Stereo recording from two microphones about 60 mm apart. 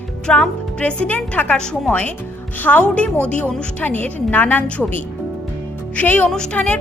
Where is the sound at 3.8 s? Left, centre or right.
Left.